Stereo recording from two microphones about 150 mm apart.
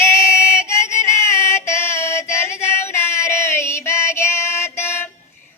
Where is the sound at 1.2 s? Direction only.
20° left (ahead or behind).